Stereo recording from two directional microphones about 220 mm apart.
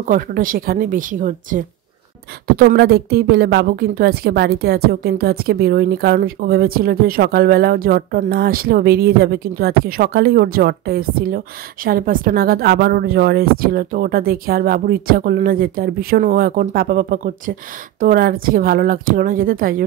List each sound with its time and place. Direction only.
0.0 s a woman's voice: 40° right (ahead or behind)